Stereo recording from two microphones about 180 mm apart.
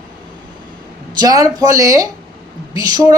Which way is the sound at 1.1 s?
20° right (ahead or behind).